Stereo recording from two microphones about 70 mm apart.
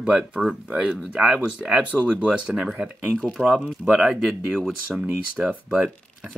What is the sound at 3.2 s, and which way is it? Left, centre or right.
Speech, centre.